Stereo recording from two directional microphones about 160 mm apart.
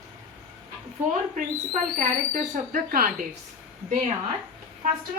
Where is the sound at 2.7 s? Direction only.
60° right (ahead or behind).